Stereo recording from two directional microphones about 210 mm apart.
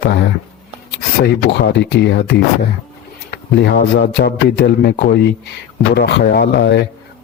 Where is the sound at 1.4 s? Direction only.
55° left (ahead or behind).